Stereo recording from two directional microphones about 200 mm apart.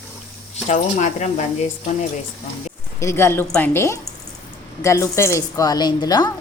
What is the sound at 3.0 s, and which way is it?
A woman's voice, 15° left (ahead or behind).